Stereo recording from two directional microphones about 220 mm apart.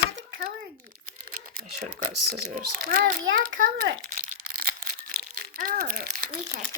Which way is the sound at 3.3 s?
40° right (ahead or behind).